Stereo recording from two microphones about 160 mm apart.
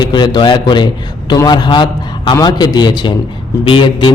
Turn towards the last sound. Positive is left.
turn(degrees=30)  # may be behind; listen again after turning